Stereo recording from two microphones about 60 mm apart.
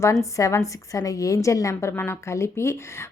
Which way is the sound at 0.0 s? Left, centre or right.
Left.